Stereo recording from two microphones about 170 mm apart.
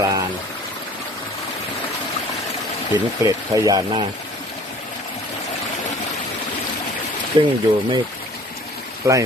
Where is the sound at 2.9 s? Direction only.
20° right (ahead or behind).